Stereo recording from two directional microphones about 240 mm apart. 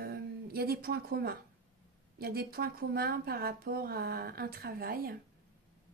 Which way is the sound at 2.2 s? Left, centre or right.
Right.